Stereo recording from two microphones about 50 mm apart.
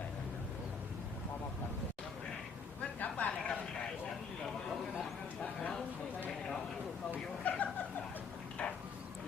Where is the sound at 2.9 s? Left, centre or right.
Left.